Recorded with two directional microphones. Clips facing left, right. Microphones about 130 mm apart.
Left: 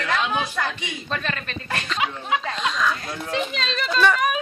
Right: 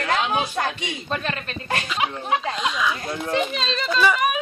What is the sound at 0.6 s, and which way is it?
Speech, 45° right (ahead or behind).